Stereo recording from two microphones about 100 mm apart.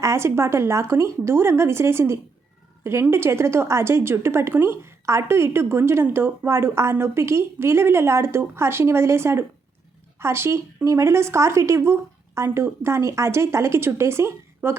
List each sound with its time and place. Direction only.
0.0 s speech: 30° right (ahead or behind)